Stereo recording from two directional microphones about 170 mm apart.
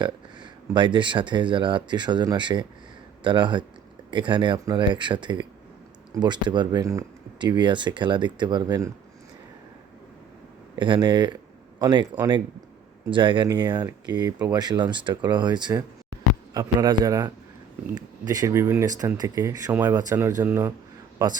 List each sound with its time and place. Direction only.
0.7 s speech: 30° right (ahead or behind)
10.8 s speech: 30° right (ahead or behind)
13.1 s speech: 30° right (ahead or behind); by 20.7 s 10° right (ahead or behind)
21.2 s speech: 25° right (ahead or behind)